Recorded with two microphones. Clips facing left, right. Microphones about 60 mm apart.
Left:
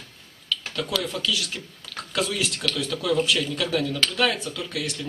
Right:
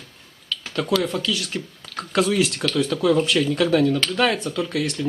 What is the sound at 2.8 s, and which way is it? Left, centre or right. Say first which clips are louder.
Speech: right 4 dB; right.